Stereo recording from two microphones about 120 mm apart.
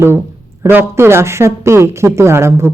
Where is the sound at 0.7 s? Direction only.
20° right (ahead or behind).